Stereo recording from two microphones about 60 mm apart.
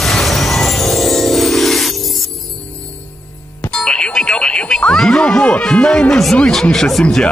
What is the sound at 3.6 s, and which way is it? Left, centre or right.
Music, centre.